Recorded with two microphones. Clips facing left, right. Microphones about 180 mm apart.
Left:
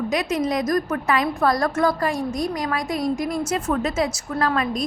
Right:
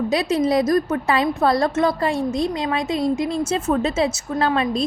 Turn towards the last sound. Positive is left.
turn(degrees=-25)  # may be behind; listen again after turning